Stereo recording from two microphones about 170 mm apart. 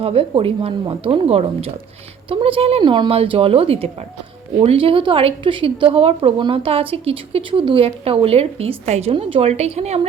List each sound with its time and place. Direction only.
0.0 s a woman's voice: 35° right (ahead or behind)